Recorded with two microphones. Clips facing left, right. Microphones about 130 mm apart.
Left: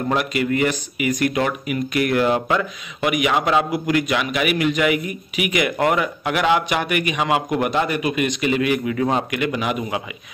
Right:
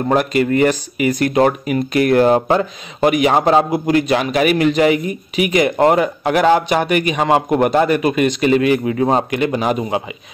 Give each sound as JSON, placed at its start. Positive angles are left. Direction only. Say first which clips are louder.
{"t": 0.1, "sound": "speech", "louder": "right 6 dB", "side_deg": -40}